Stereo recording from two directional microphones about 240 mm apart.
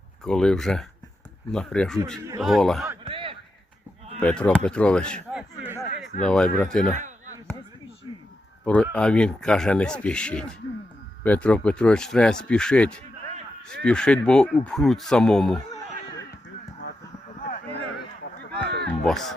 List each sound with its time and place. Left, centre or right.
0.3 s speech: centre
3.1 s a sound: right
4.2 s speech: centre
8.6 s speech: centre
18.5 s a sound: right
19.0 s speech: centre